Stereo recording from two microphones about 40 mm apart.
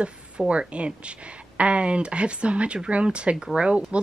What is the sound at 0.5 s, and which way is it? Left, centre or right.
Speech, right.